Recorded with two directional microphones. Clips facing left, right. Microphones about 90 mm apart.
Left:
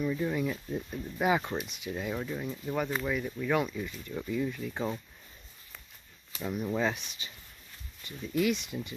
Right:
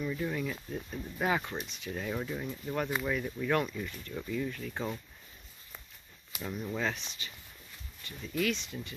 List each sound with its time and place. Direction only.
0.0 s speech: 10° left (ahead or behind)
6.4 s speech: 10° left (ahead or behind)